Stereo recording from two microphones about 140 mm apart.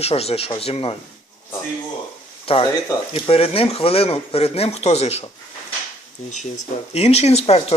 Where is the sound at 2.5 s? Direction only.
45° left (ahead or behind).